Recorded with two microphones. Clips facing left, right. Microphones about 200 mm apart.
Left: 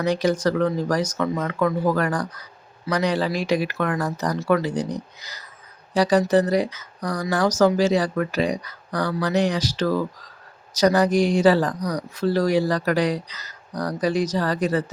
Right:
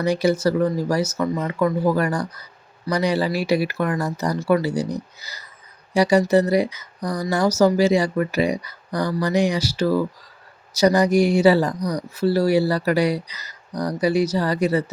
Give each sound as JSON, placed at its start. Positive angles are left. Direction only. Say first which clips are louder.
{"t": 0.0, "sound": "speech", "louder": "right 2 dB", "side_deg": -10}